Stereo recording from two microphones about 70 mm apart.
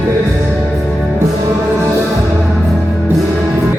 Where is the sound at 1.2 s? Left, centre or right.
Right.